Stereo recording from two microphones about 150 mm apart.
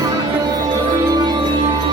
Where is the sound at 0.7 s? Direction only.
25° right (ahead or behind).